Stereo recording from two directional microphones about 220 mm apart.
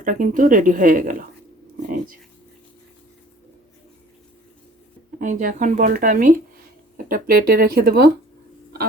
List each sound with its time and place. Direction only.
0.0 s speech: 35° right (ahead or behind)
5.2 s speech: 35° right (ahead or behind)